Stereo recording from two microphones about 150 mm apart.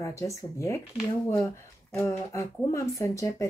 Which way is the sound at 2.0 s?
20° left (ahead or behind).